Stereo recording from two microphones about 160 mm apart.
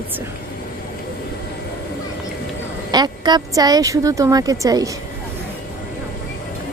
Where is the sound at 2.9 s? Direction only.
25° right (ahead or behind).